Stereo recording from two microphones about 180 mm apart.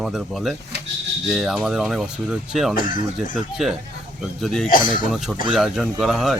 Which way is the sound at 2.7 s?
50° left (ahead or behind).